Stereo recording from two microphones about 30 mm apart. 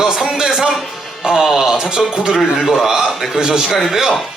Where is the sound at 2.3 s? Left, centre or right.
Centre.